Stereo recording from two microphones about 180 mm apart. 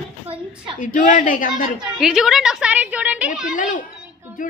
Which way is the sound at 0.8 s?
45° left (ahead or behind).